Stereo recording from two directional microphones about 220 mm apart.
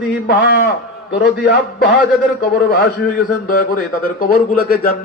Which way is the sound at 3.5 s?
40° left (ahead or behind).